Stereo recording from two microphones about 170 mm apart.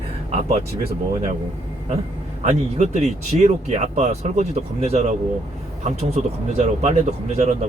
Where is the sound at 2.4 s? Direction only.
45° right (ahead or behind).